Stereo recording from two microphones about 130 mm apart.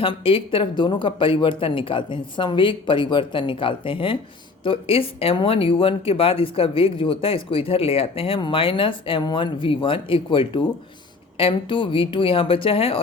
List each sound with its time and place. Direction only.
0.0 s speech: 45° left (ahead or behind)